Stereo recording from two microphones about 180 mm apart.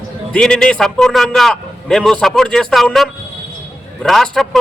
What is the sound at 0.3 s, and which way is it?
A man's voice, 5° left (ahead or behind).